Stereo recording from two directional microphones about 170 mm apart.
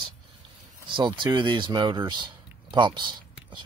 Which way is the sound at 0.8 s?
30° right (ahead or behind).